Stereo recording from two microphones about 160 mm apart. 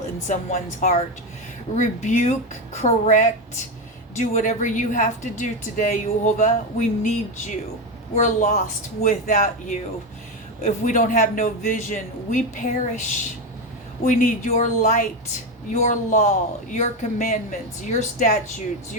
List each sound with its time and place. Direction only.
0.3 s speech: 50° left (ahead or behind)